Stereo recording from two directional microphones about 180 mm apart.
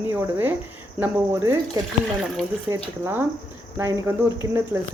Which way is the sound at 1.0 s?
15° right (ahead or behind).